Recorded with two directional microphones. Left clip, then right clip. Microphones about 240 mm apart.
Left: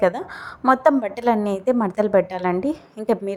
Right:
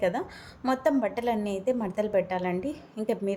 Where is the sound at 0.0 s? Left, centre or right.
Centre.